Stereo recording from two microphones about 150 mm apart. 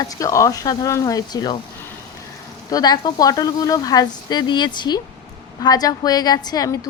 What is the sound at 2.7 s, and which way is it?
Speech, 25° left (ahead or behind).